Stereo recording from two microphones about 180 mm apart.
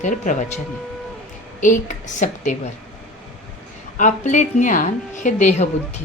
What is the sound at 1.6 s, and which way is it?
Speech, 45° left (ahead or behind).